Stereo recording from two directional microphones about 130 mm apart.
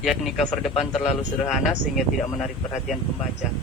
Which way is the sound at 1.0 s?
55° left (ahead or behind).